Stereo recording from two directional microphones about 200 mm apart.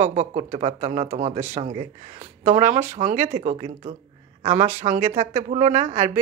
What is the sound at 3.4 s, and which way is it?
Speech, 35° right (ahead or behind).